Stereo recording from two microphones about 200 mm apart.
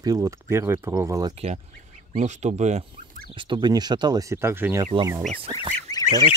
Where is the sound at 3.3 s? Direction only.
25° right (ahead or behind).